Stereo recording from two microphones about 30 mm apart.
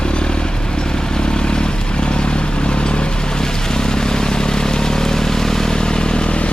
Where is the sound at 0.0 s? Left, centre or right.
Left.